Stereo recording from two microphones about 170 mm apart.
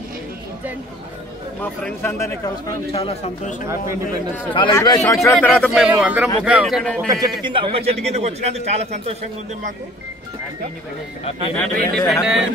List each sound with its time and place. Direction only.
1.6 s speech: 10° left (ahead or behind)
2.9 s speech: 35° left (ahead or behind)
4.7 s speech: 15° left (ahead or behind)
5.7 s speech: 5° right (ahead or behind)
7.1 s a man's voice: 25° right (ahead or behind); by 9.1 s 40° right (ahead or behind)
11.5 s speech: 5° left (ahead or behind)